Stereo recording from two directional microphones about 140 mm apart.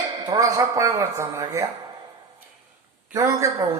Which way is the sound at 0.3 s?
25° right (ahead or behind).